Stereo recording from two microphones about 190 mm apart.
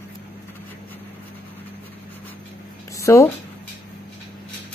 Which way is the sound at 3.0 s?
15° left (ahead or behind).